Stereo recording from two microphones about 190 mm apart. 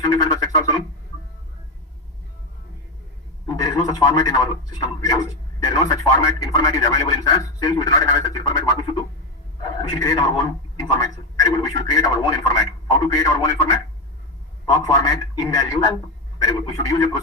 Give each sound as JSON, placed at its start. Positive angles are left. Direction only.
{"t": 0.1, "sound": "a sound", "side_deg": 20}
{"t": 3.4, "sound": "speech", "side_deg": 20}
{"t": 14.7, "sound": "speech", "side_deg": 20}